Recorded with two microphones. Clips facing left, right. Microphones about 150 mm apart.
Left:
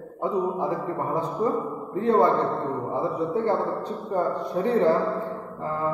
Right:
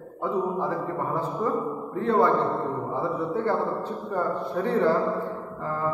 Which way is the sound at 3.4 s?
15° left (ahead or behind).